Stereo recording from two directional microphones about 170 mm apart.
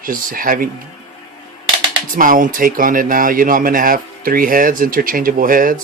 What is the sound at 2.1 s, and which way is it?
Speech, 55° right (ahead or behind).